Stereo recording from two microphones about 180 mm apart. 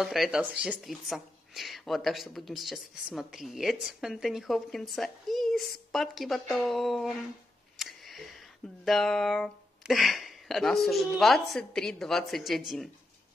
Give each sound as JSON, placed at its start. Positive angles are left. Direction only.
{"t": 0.0, "sound": "speech", "side_deg": 0}
{"t": 7.7, "sound": "a sound", "side_deg": 0}
{"t": 8.8, "sound": "speech", "side_deg": 0}